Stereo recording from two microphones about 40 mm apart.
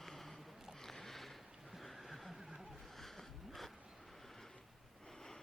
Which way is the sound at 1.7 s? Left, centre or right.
Centre.